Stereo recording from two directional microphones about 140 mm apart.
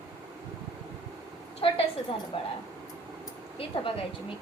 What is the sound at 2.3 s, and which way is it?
Speech, 40° left (ahead or behind).